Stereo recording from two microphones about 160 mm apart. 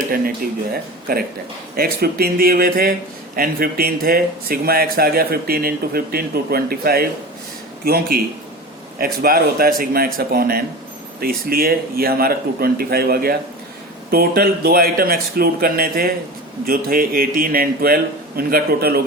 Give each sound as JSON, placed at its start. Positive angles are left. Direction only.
{"t": 1.7, "sound": "speech", "side_deg": -70}
{"t": 9.2, "sound": "speech", "side_deg": -65}